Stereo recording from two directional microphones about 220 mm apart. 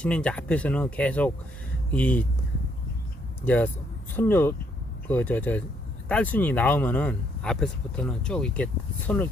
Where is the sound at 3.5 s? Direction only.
5° left (ahead or behind).